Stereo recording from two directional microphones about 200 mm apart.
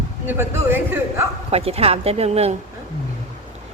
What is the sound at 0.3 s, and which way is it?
Speech, 10° right (ahead or behind).